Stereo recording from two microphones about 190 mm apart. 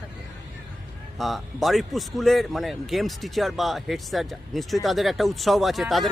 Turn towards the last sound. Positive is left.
turn(degrees=0)  # may be behind; listen again after turning